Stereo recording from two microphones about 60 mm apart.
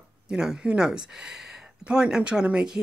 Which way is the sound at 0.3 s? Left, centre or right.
Centre.